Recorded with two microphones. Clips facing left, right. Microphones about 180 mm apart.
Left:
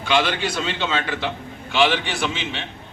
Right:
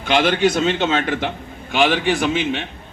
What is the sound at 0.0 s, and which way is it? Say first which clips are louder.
A man's voice: right 5 dB; 50° right (ahead or behind).